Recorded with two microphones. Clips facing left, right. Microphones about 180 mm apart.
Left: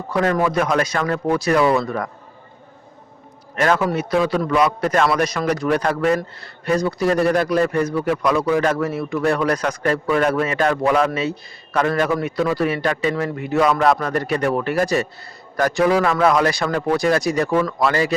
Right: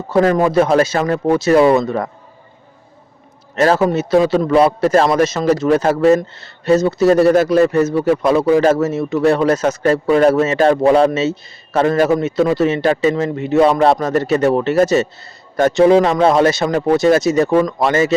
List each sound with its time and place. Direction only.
0.1 s a man's voice: 30° right (ahead or behind)
3.5 s a man's voice: 25° right (ahead or behind)